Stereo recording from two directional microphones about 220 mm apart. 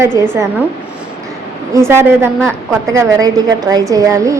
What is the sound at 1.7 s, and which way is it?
Speech, 10° right (ahead or behind).